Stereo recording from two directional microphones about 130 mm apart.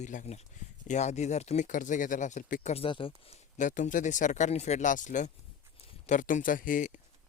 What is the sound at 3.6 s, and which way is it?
Speech, 80° left.